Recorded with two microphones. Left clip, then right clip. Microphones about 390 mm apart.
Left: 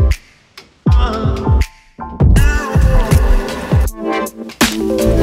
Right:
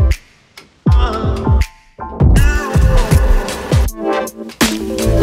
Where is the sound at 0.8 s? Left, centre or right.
Centre.